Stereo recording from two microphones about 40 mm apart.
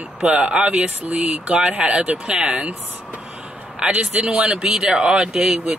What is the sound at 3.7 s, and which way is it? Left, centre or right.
A man's voice, right.